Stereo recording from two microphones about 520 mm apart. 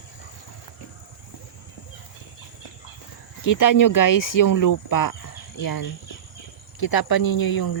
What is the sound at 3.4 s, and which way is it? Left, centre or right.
Speech, left.